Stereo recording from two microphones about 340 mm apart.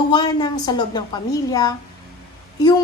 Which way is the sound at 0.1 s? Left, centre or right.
Centre.